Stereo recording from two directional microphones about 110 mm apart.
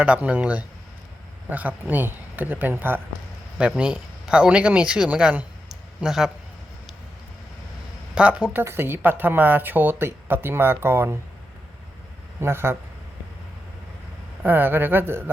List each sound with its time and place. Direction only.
0.0 s speech: 10° right (ahead or behind)
5.6 s a sound: 5° right (ahead or behind)
8.1 s speech: 10° right (ahead or behind)
8.5 s a woman's voice: 20° right (ahead or behind)
12.4 s a woman's voice: 20° right (ahead or behind)
14.4 s a woman's voice: 15° right (ahead or behind)